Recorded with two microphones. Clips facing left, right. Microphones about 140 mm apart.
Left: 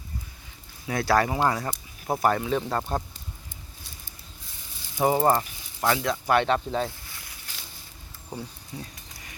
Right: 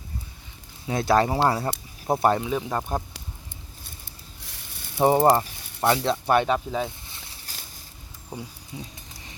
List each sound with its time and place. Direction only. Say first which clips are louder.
0.9 s speech: right 2 dB; 20° right (ahead or behind)
2.5 s speech: even; 10° right (ahead or behind)
4.9 s speech: right 3 dB; 30° right (ahead or behind)
6.4 s speech: even; 5° right (ahead or behind)
7.0 s a sound: even; 25° right (ahead or behind)
8.7 s speech: right 1 dB; 15° right (ahead or behind)